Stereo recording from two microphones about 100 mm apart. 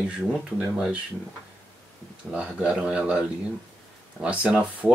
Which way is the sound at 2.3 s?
15° right (ahead or behind).